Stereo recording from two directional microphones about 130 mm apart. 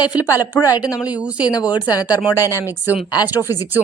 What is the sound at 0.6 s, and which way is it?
Speech, 25° left (ahead or behind).